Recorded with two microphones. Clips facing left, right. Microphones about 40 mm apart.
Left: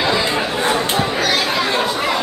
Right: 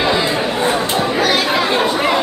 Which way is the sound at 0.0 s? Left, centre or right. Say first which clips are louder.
Right 2 dB; centre.